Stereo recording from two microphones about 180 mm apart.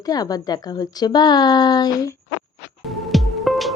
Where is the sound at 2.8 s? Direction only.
Centre (ahead or behind).